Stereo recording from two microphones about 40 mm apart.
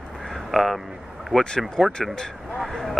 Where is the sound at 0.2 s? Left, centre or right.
Centre.